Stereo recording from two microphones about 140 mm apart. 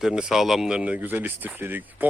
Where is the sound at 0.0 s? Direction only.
5° right (ahead or behind).